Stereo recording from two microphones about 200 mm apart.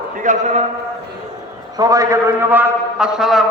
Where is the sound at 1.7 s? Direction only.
15° right (ahead or behind); by 3.4 s centre (ahead or behind).